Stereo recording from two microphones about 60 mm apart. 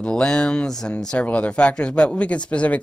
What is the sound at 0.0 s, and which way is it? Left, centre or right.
Speech, centre.